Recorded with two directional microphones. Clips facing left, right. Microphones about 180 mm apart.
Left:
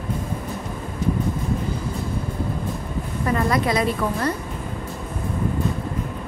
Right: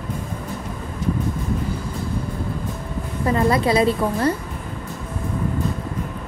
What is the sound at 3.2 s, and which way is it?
A woman's voice, 25° right (ahead or behind).